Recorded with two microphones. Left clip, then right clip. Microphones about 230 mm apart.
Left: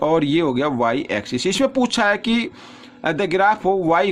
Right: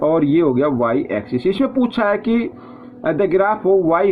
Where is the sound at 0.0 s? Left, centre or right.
Left.